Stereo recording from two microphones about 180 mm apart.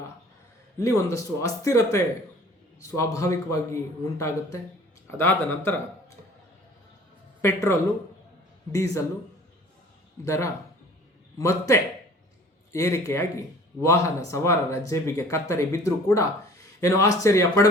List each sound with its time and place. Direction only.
0.8 s speech: 20° left (ahead or behind)
7.4 s speech: 15° left (ahead or behind)
10.2 s speech: 15° left (ahead or behind)